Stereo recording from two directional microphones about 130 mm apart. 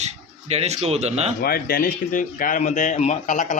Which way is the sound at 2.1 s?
90° left.